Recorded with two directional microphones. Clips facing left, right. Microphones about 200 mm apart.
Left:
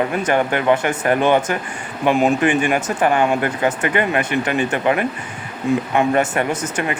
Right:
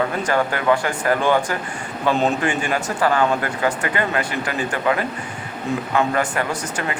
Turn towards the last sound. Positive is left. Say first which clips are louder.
# left 4 dB
turn(degrees=20)  # may be behind; listen again after turning